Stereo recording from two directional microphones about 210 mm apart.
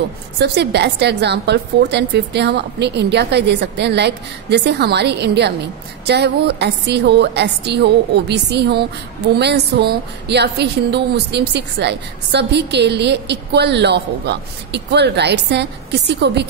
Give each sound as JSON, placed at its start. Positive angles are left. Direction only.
{"t": 0.4, "sound": "a woman's voice", "side_deg": -55}